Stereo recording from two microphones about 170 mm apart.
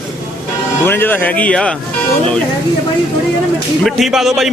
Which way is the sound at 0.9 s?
10° left (ahead or behind).